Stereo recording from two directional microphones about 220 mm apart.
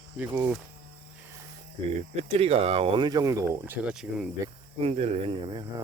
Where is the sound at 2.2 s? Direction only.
30° right (ahead or behind); by 4.3 s 5° right (ahead or behind).